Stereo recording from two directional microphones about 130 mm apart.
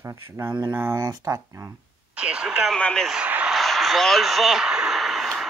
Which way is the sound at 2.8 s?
5° left (ahead or behind).